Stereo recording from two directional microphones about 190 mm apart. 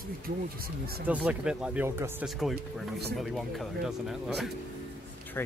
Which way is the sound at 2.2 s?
Centre (ahead or behind).